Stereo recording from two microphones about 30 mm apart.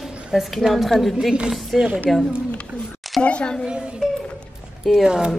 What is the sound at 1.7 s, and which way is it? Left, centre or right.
Speech, centre.